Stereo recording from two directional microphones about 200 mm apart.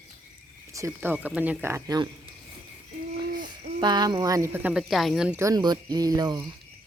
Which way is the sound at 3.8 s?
20° right (ahead or behind).